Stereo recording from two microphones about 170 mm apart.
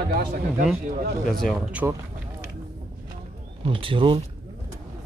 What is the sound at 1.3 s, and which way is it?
Speech, centre (ahead or behind).